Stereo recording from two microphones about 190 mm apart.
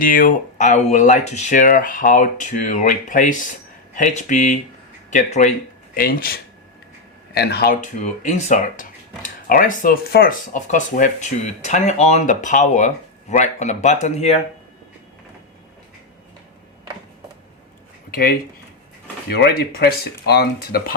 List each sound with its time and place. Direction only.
0.0 s speech: 45° left (ahead or behind)
18.1 s speech: 50° left (ahead or behind)